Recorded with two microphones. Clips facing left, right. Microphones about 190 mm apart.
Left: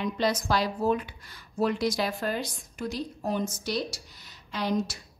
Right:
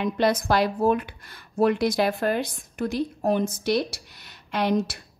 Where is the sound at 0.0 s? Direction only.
60° right (ahead or behind).